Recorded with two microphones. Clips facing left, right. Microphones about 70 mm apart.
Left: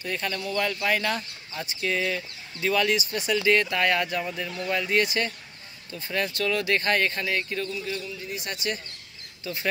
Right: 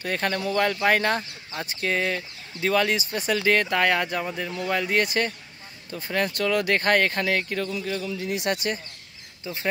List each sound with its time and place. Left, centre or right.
0.0 s speech: right
8.0 s speech: right
9.4 s speech: right